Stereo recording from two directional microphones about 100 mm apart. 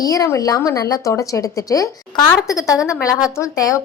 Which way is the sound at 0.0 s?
35° left (ahead or behind).